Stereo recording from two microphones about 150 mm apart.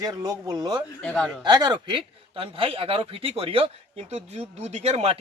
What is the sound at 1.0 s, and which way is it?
Speech, 5° left (ahead or behind).